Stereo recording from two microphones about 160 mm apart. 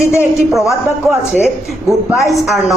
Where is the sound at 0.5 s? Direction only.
Centre (ahead or behind).